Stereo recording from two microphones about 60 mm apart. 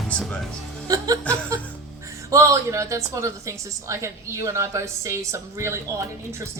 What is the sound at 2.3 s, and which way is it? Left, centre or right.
A woman's voice, right.